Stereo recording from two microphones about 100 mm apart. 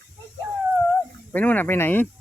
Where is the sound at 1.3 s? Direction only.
15° left (ahead or behind).